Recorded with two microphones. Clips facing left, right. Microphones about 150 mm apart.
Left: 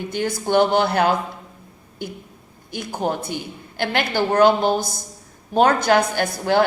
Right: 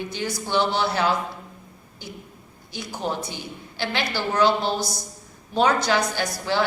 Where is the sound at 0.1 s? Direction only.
55° left (ahead or behind).